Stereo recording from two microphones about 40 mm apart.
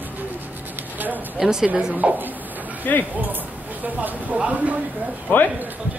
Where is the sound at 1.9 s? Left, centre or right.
Right.